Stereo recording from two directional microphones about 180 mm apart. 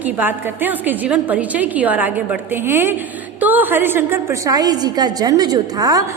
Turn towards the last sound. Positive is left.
turn(degrees=-20)  # may be behind; listen again after turning